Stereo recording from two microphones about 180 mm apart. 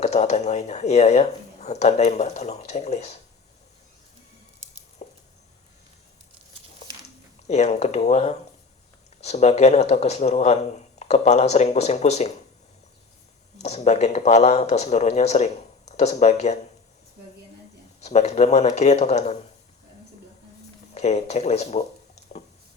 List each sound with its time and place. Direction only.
0.0 s speech: 40° left (ahead or behind)
5.0 s a sound: 40° left (ahead or behind)
7.4 s speech: 40° left (ahead or behind)
13.6 s speech: 35° left (ahead or behind)
18.0 s speech: 40° left (ahead or behind)
20.9 s speech: 40° left (ahead or behind)